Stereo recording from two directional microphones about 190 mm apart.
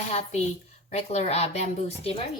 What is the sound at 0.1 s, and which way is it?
A woman's voice, 35° left (ahead or behind).